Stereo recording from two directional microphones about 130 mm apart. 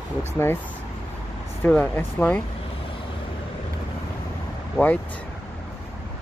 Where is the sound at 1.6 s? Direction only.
10° left (ahead or behind).